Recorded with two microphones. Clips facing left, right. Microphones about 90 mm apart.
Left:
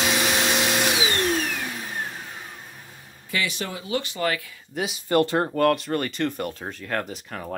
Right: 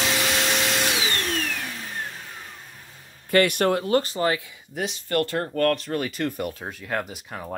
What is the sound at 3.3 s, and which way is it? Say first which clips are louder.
Speech: right 9 dB; 55° right (ahead or behind).